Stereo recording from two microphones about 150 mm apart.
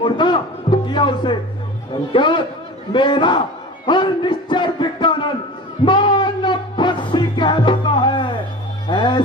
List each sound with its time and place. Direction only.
0.0 s a man's voice: 30° left (ahead or behind)
5.8 s music: 30° left (ahead or behind)